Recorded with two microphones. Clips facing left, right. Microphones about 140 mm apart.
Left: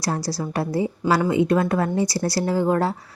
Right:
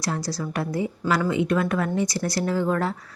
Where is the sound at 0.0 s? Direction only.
35° left (ahead or behind).